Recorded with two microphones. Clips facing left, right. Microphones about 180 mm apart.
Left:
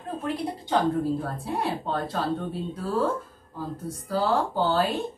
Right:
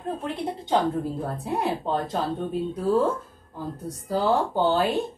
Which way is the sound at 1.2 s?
20° right (ahead or behind).